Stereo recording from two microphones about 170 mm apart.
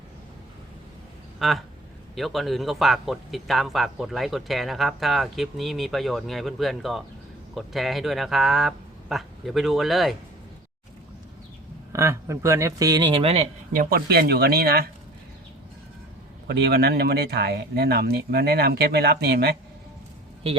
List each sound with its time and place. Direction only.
1.4 s speech: centre (ahead or behind)
11.9 s a man's voice: 20° right (ahead or behind); by 13.5 s 35° right (ahead or behind)
13.7 s speech: 65° right (ahead or behind)
16.5 s speech: 75° right (ahead or behind)